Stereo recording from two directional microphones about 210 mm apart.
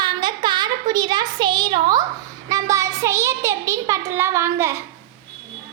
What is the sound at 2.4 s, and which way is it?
A child's voice, 15° right (ahead or behind).